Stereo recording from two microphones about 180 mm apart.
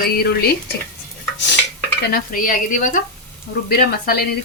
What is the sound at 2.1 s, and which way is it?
Speech, 50° left (ahead or behind).